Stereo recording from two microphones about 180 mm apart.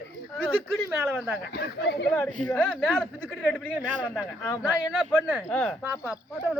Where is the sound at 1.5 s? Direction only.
70° left (ahead or behind).